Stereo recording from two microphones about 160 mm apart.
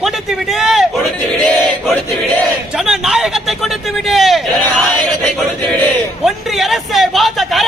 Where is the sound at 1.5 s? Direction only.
5° left (ahead or behind).